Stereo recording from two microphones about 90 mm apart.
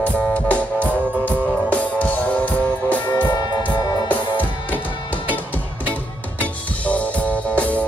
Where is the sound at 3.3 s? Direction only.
55° left (ahead or behind).